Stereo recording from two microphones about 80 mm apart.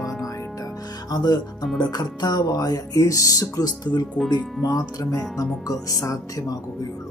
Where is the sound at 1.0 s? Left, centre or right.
Left.